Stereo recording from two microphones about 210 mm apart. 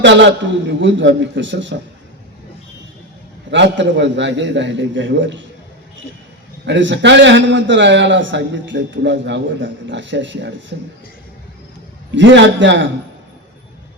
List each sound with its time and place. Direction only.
0.0 s a man's voice: 55° right (ahead or behind)
3.5 s a man's voice: 55° right (ahead or behind)
6.7 s a man's voice: 60° right (ahead or behind)
12.1 s a man's voice: 60° right (ahead or behind)